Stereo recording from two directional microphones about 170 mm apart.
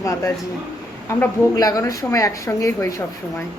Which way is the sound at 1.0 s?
20° left (ahead or behind).